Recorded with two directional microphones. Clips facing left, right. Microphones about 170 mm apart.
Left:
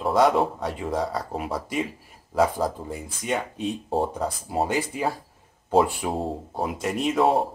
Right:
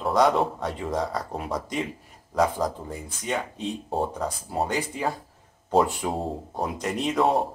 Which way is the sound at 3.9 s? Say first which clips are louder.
Left 2 dB; centre (ahead or behind).